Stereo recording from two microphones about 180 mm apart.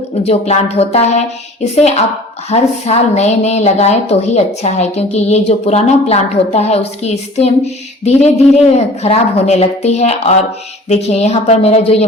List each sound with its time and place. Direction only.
0.3 s speech: 35° left (ahead or behind)